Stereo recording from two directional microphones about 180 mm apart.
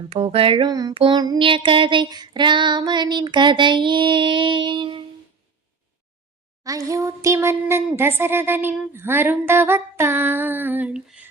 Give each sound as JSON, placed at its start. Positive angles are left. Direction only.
{"t": 0.1, "sound": "child singing", "side_deg": -30}
{"t": 6.7, "sound": "speech", "side_deg": -20}